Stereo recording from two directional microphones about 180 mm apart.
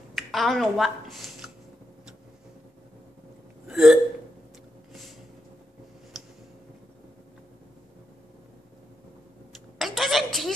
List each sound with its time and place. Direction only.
0.1 s speech: centre (ahead or behind)
3.6 s hiccup: 5° right (ahead or behind)
9.8 s a sound: centre (ahead or behind)